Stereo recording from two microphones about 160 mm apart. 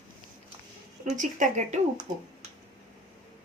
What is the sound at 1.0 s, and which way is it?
Speech, 50° right (ahead or behind).